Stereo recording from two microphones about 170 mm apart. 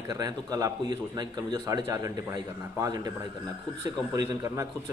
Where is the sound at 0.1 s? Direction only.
20° right (ahead or behind).